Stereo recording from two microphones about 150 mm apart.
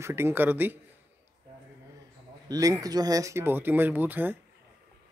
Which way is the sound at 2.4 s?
25° right (ahead or behind).